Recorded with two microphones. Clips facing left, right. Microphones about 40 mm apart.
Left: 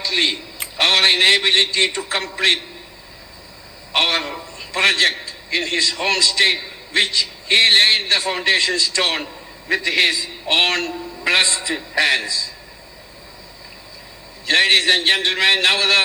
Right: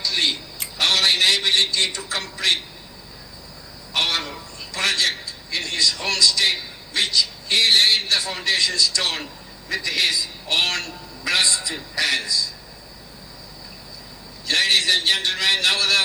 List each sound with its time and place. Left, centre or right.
0.0 s a man's voice: left
3.9 s a man's voice: left
14.4 s a man's voice: left